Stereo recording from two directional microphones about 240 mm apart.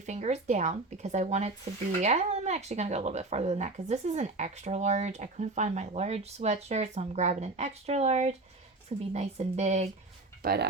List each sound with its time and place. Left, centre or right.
0.0 s speech: right
10.4 s speech: right